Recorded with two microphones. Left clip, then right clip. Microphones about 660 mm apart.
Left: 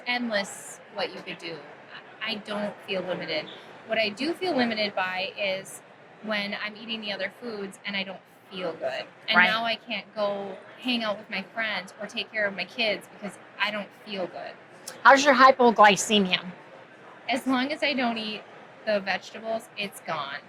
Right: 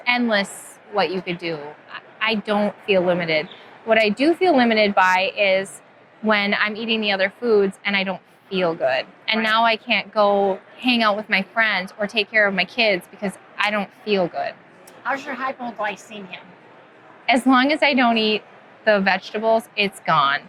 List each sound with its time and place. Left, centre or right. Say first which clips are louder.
0.0 s a woman's voice: right 8 dB; right
15.0 s a woman's voice: left 10 dB; left
17.2 s a woman's voice: right 10 dB; right